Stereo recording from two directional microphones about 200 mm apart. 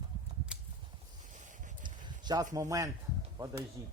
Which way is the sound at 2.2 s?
20° right (ahead or behind).